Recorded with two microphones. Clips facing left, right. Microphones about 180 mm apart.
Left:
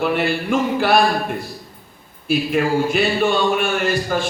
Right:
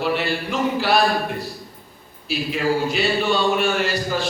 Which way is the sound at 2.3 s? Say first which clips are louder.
Left 4 dB; 55° left (ahead or behind).